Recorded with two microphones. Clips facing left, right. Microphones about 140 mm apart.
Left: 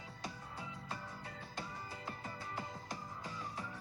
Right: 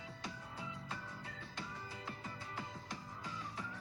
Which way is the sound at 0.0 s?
45° left (ahead or behind).